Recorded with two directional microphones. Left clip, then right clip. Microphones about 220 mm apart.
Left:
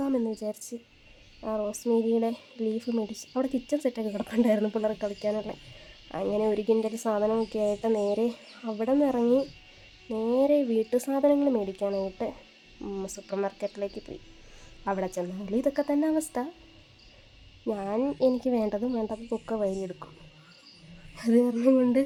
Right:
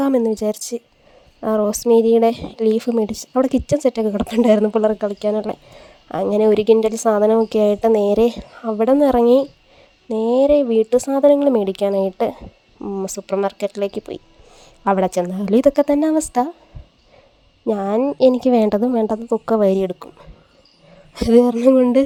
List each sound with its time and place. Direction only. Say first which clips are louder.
0.0 s speech: right 12 dB; 40° right (ahead or behind)
12.8 s speech: right 10 dB; 20° right (ahead or behind)
13.1 s speech: right 11 dB; 35° right (ahead or behind)
17.7 s speech: right 11 dB; 35° right (ahead or behind)
21.2 s speech: right 11 dB; 40° right (ahead or behind)